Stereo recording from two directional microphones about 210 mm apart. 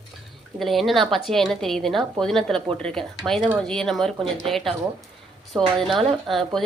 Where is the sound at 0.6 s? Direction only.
Centre (ahead or behind).